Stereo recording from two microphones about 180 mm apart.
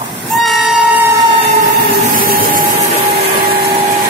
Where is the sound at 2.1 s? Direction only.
50° right (ahead or behind).